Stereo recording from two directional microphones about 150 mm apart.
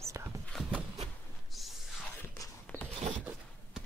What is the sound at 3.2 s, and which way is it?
Rub, 10° right (ahead or behind).